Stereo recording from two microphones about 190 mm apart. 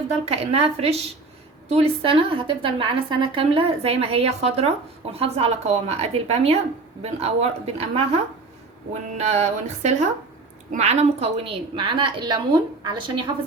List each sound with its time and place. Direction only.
0.3 s a woman's voice: 30° right (ahead or behind)